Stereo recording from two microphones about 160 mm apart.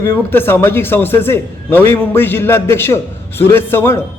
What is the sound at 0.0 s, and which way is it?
A man's voice, 15° left (ahead or behind).